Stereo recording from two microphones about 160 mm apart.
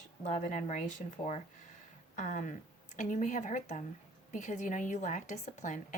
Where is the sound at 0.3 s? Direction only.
50° left (ahead or behind).